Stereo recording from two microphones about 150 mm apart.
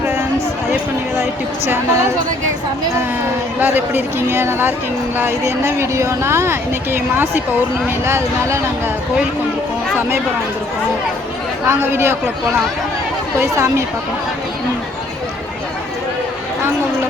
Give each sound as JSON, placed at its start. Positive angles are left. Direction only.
{"t": 1.2, "sound": "speech", "side_deg": -15}
{"t": 3.6, "sound": "speech", "side_deg": -15}
{"t": 11.6, "sound": "speech", "side_deg": -15}
{"t": 13.4, "sound": "speech", "side_deg": -20}